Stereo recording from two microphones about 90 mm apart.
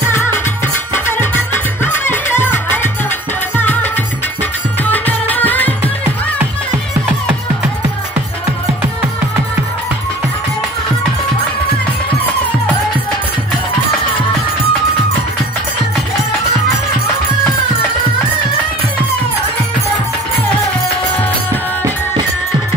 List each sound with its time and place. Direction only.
0.1 s music: 30° left (ahead or behind)